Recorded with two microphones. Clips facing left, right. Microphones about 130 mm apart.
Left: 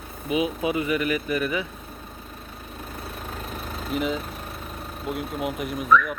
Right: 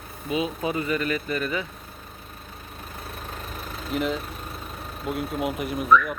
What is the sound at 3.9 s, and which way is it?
Speech, centre (ahead or behind).